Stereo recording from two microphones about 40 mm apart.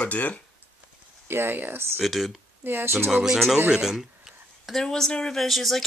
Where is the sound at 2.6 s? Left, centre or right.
Right.